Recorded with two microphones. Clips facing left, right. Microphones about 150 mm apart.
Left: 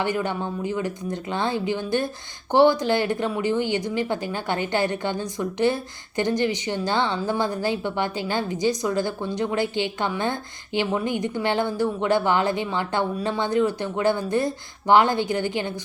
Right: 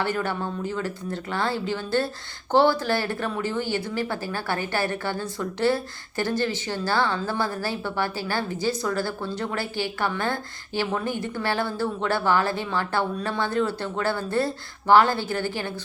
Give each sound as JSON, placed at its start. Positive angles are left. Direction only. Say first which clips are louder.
{"t": 0.0, "sound": "speech", "louder": "left 1 dB", "side_deg": 15}